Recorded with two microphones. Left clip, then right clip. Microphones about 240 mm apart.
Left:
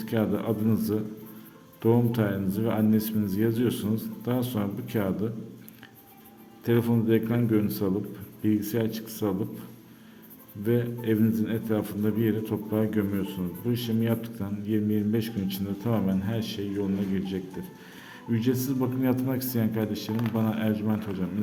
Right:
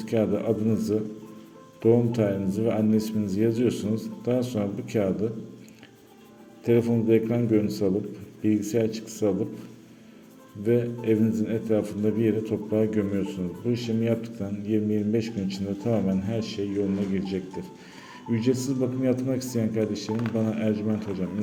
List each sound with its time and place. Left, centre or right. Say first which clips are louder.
0.0 s a man's voice: right 3 dB; centre
6.7 s a man's voice: right 3 dB; centre
10.6 s a man's voice: right 3 dB; centre